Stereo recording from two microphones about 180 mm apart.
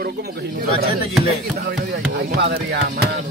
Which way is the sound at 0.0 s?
60° right (ahead or behind).